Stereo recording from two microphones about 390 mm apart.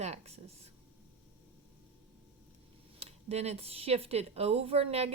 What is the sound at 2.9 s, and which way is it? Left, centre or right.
Speech, centre.